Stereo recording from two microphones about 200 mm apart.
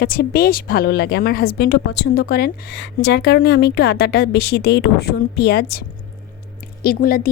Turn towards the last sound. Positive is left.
turn(degrees=45)  # may be behind; listen again after turning